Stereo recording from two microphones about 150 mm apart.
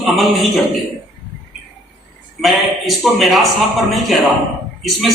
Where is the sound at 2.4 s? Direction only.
Centre (ahead or behind).